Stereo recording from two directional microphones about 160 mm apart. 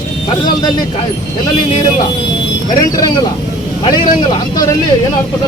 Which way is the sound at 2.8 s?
25° left (ahead or behind).